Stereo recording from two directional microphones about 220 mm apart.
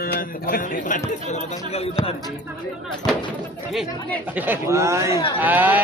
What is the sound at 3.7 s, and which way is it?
Speech, centre (ahead or behind).